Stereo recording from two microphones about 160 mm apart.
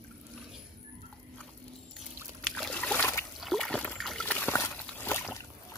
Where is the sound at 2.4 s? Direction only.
Centre (ahead or behind).